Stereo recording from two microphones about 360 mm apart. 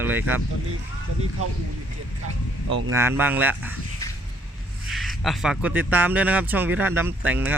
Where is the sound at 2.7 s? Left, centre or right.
Right.